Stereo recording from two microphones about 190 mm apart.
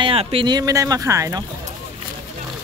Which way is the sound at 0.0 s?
30° right (ahead or behind).